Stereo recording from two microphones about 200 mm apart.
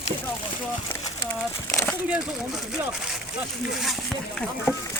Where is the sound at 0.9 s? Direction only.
10° left (ahead or behind).